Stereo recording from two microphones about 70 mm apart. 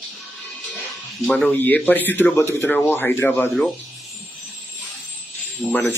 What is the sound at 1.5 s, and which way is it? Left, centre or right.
Speech, left.